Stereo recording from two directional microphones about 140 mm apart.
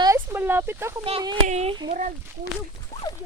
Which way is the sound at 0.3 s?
15° right (ahead or behind).